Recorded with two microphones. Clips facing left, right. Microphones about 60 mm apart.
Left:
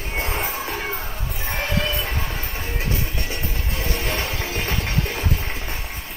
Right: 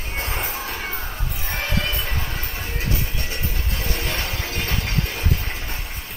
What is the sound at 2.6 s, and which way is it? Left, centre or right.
Music, left.